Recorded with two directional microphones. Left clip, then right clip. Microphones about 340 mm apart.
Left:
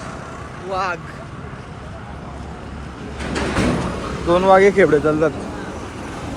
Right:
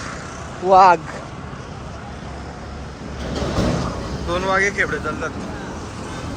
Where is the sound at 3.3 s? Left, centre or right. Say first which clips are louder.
Left 2 dB; left.